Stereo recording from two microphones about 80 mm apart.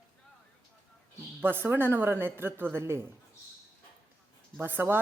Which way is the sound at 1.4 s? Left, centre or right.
Right.